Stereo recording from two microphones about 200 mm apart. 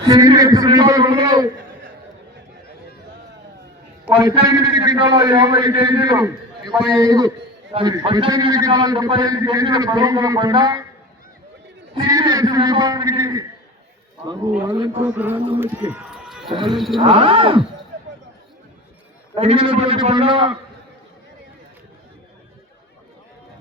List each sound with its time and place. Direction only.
0.0 s a man's voice: 20° right (ahead or behind)
4.1 s a man's voice: 20° right (ahead or behind)
11.9 s a man's voice: 20° right (ahead or behind)
15.0 s a man's voice: 10° right (ahead or behind)
15.4 s a man's voice: 25° right (ahead or behind)
15.6 s run: 10° right (ahead or behind)
16.6 s speech: centre (ahead or behind)
17.0 s a man's voice: 25° right (ahead or behind)
19.3 s a man's voice: 30° right (ahead or behind)